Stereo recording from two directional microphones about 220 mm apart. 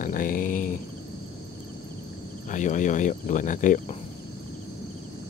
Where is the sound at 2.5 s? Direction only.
35° left (ahead or behind).